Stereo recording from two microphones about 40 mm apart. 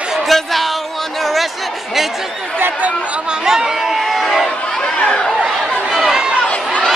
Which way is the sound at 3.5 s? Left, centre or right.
Centre.